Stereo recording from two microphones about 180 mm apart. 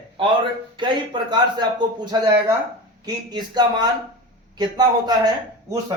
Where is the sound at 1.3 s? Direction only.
25° right (ahead or behind).